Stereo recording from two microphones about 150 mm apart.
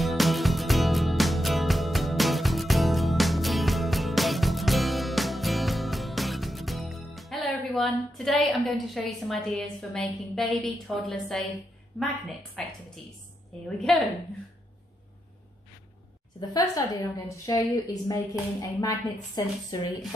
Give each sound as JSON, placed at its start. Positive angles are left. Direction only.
{"t": 0.0, "sound": "music", "side_deg": 0}
{"t": 12.0, "sound": "a woman's voice", "side_deg": 0}
{"t": 16.3, "sound": "a woman's voice", "side_deg": 25}